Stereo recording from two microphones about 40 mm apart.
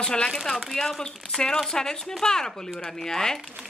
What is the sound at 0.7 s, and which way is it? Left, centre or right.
A woman's voice, centre.